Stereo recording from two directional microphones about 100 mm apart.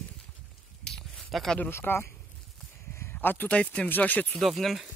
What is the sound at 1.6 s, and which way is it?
Speech, 20° left (ahead or behind).